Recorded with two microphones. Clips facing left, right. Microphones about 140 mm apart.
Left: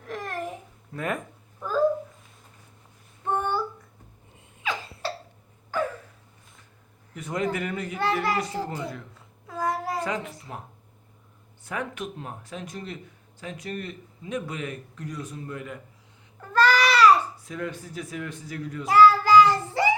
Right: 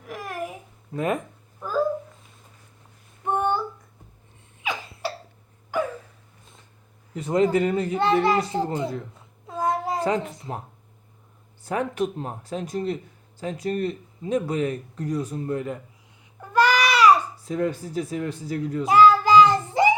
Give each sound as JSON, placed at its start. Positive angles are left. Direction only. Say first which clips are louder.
{"t": 0.0, "sound": "babbling", "louder": "even", "side_deg": -10}
{"t": 0.9, "sound": "a child's voice", "louder": "right 5 dB", "side_deg": -20}
{"t": 1.6, "sound": "a sound", "louder": "even", "side_deg": 0}
{"t": 3.2, "sound": "child singing", "louder": "right 3 dB", "side_deg": -15}
{"t": 4.6, "sound": "cough", "louder": "right 1 dB", "side_deg": -15}
{"t": 5.7, "sound": "a sound", "louder": "right 2 dB", "side_deg": -15}
{"t": 7.1, "sound": "a child's voice", "louder": "right 8 dB", "side_deg": -30}
{"t": 9.5, "sound": "a sound", "louder": "right 3 dB", "side_deg": -20}
{"t": 10.5, "sound": "speech", "louder": "right 6 dB", "side_deg": -35}
{"t": 16.4, "sound": "babbling", "louder": "right 1 dB", "side_deg": -15}
{"t": 17.4, "sound": "speech", "louder": "right 8 dB", "side_deg": -35}
{"t": 18.9, "sound": "child singing", "louder": "right 1 dB", "side_deg": -20}